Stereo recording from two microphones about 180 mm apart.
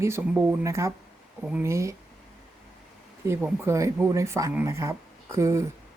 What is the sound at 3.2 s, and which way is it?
Speech, 15° right (ahead or behind).